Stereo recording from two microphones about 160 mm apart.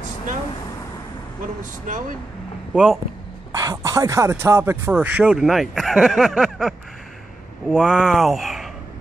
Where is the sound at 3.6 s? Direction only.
20° right (ahead or behind); by 8.7 s centre (ahead or behind).